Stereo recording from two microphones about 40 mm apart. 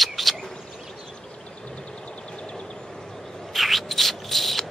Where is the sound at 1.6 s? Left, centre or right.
Left.